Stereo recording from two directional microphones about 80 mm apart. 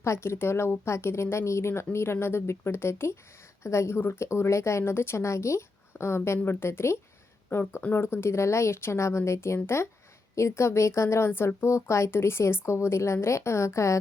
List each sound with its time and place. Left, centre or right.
0.0 s a woman's voice: left